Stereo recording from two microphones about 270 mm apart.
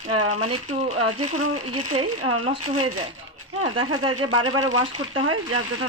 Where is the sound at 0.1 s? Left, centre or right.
Right.